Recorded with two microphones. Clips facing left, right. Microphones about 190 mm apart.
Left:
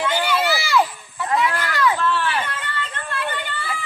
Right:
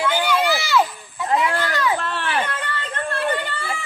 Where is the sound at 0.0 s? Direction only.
10° right (ahead or behind).